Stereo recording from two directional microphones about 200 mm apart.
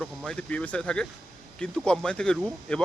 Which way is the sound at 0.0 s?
5° left (ahead or behind).